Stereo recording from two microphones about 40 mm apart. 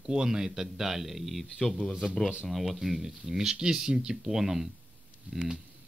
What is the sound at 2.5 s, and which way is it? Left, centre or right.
Speech, centre.